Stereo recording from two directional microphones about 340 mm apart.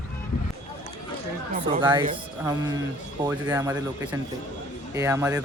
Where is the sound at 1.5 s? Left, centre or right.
Centre.